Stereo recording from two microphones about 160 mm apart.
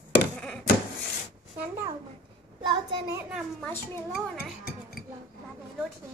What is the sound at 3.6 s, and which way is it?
Speech, 15° left (ahead or behind).